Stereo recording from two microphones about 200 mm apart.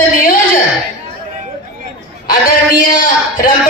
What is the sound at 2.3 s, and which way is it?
A man's voice, 45° left (ahead or behind).